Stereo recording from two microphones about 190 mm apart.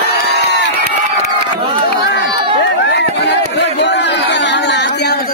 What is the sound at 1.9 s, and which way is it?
Run, 65° left (ahead or behind).